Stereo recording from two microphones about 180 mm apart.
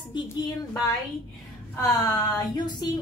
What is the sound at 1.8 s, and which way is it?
A woman's voice, 20° left (ahead or behind).